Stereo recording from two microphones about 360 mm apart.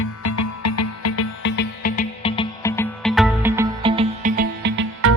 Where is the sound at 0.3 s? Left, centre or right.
Left.